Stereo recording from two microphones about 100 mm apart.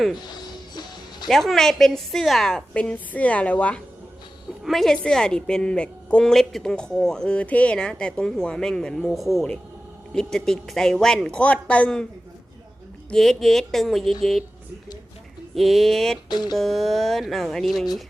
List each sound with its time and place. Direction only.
0.4 s music: 45° left (ahead or behind)
1.3 s a woman's voice: centre (ahead or behind)
4.6 s a woman's voice: centre (ahead or behind)
13.1 s speech: 5° left (ahead or behind)
15.5 s speech: centre (ahead or behind)
16.3 s a sound: 45° left (ahead or behind)
16.6 s speech: centre (ahead or behind)